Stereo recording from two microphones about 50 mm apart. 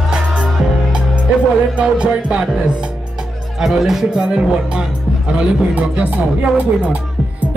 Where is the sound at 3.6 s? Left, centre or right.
Centre.